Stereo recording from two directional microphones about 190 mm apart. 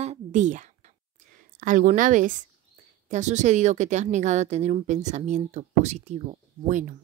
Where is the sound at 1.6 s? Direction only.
45° right (ahead or behind).